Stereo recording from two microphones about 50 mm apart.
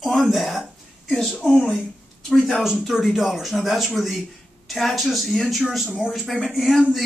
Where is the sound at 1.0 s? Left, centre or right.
Centre.